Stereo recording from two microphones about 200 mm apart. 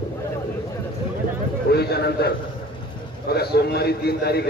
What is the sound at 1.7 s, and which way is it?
A man's voice, 55° left (ahead or behind).